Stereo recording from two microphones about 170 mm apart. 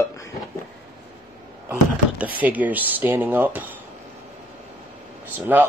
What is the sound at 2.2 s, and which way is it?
Speech, 10° right (ahead or behind).